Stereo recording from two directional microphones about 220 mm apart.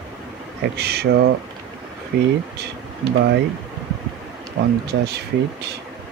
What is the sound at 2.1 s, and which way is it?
Speech, 45° right (ahead or behind).